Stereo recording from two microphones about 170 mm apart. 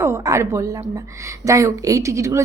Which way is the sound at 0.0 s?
15° right (ahead or behind).